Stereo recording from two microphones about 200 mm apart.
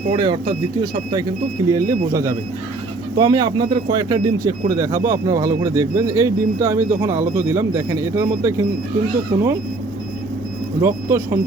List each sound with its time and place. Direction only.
0.1 s speech: 25° right (ahead or behind)
10.8 s speech: 15° right (ahead or behind)